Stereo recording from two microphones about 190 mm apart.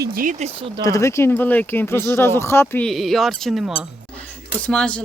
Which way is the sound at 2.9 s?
Centre (ahead or behind).